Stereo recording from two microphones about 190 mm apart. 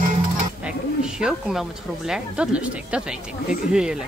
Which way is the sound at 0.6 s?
5° right (ahead or behind).